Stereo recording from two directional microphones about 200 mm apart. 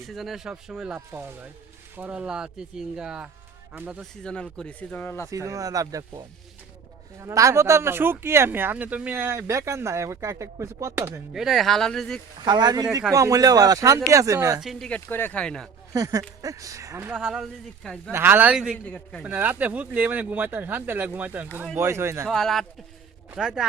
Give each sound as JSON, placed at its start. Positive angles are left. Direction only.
{"t": 0.0, "sound": "speech", "side_deg": 0}
{"t": 4.2, "sound": "speech", "side_deg": 5}
{"t": 5.3, "sound": "speech", "side_deg": -15}
{"t": 11.3, "sound": "speech", "side_deg": 0}
{"t": 12.5, "sound": "speech", "side_deg": -20}
{"t": 14.6, "sound": "speech", "side_deg": 0}
{"t": 15.9, "sound": "speech", "side_deg": -15}
{"t": 17.2, "sound": "speech", "side_deg": -5}
{"t": 18.1, "sound": "speech", "side_deg": -10}
{"t": 19.2, "sound": "speech", "side_deg": -10}
{"t": 22.3, "sound": "speech", "side_deg": 0}